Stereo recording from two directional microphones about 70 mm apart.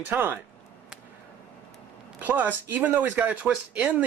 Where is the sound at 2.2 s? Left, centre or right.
Right.